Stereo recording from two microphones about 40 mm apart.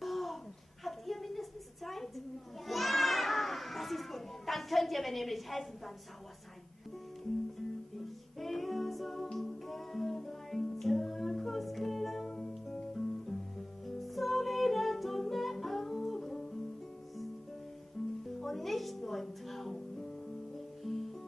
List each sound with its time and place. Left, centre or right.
0.0 s a sound: centre
8.4 s music: centre
12.3 s music: centre
12.7 s guitar: centre
13.8 s music: centre
18.0 s music: centre